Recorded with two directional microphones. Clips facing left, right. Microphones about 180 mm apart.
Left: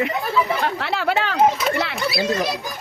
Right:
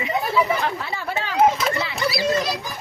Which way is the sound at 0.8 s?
80° left.